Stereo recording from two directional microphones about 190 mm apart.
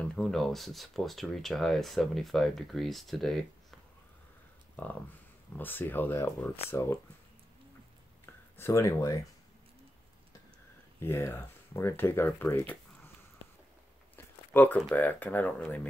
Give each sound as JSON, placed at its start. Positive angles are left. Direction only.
{"t": 0.0, "sound": "speech", "side_deg": 5}
{"t": 4.8, "sound": "speech", "side_deg": 10}
{"t": 8.5, "sound": "speech", "side_deg": 15}
{"t": 11.0, "sound": "speech", "side_deg": 15}
{"t": 14.1, "sound": "a sound", "side_deg": 10}
{"t": 14.8, "sound": "speech", "side_deg": 5}